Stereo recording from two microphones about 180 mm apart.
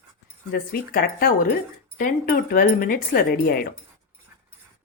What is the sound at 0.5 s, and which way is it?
A woman's voice, 60° left (ahead or behind).